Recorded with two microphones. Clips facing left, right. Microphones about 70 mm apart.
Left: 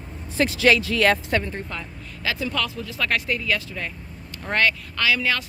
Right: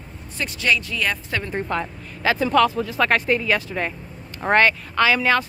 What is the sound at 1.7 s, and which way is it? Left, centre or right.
Speech, right.